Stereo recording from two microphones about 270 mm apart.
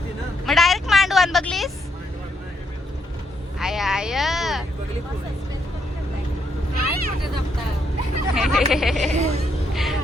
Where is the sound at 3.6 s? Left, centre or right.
Centre.